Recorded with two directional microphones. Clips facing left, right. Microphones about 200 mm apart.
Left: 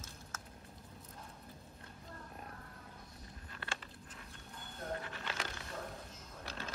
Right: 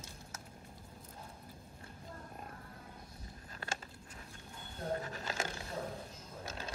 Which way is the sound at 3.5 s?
40° right (ahead or behind).